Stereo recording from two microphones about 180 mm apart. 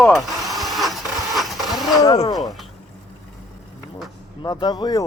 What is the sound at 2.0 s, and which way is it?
Speech, 20° left (ahead or behind).